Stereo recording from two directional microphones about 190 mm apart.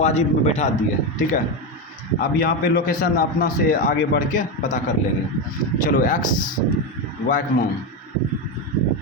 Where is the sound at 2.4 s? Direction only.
50° left (ahead or behind).